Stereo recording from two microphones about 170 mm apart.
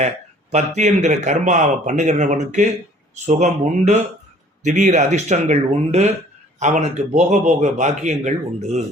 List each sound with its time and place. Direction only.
0.5 s a man's voice: 45° right (ahead or behind)